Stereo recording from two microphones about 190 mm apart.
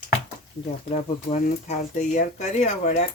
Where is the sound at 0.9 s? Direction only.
40° left (ahead or behind).